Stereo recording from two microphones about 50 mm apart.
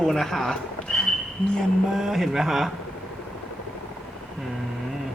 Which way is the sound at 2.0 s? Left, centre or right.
Centre.